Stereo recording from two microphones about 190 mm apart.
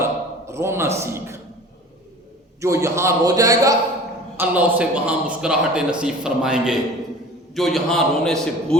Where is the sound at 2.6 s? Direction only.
15° right (ahead or behind).